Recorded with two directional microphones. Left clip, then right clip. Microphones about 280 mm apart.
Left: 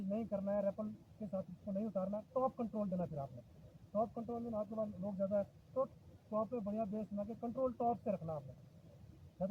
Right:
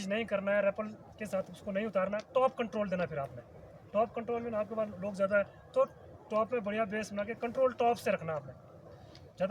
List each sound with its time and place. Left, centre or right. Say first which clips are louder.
0.1 s speech: right 8 dB; right